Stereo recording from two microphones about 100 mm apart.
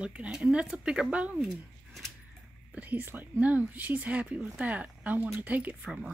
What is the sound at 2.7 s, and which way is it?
Speech, 15° right (ahead or behind).